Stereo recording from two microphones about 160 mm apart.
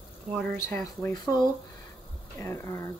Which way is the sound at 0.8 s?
25° left (ahead or behind).